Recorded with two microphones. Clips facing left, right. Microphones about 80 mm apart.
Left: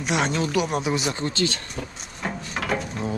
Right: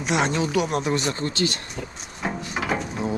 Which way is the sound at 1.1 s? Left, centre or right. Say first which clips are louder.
Even; left.